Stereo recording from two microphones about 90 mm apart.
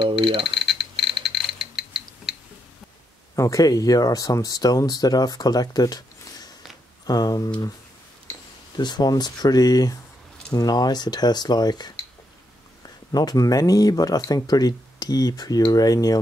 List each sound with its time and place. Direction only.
0.0 s speech: 80° right
0.6 s frog: centre (ahead or behind)
1.2 s a sound: centre (ahead or behind)
3.3 s speech: 35° left (ahead or behind)
8.7 s speech: 50° left (ahead or behind)